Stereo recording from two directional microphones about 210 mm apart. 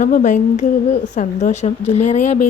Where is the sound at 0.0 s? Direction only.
35° left (ahead or behind).